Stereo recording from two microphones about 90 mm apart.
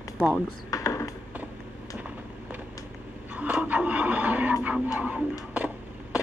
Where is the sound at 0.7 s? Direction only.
35° left (ahead or behind).